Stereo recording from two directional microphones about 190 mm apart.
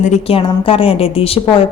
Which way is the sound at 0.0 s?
35° left (ahead or behind).